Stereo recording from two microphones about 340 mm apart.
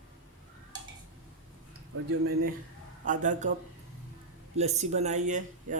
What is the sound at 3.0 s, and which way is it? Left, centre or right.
Speech, right.